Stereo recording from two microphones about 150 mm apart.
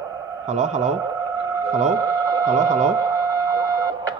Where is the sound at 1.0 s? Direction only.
25° right (ahead or behind).